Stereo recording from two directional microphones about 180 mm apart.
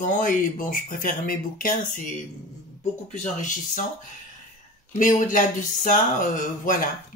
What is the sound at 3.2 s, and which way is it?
Speech, 45° left (ahead or behind).